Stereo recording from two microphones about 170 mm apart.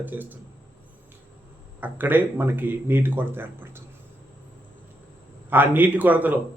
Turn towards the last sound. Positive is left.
turn(degrees=-10)  # may be behind; listen again after turning